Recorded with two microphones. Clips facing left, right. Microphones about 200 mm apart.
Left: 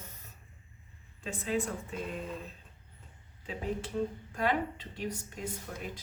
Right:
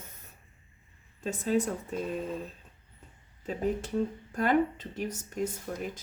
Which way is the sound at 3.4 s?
45° right (ahead or behind).